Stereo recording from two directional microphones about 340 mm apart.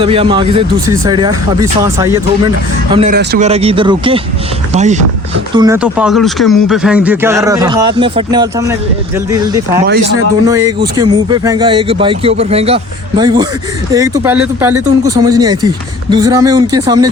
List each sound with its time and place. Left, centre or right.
0.0 s speech: centre
5.5 s speech: centre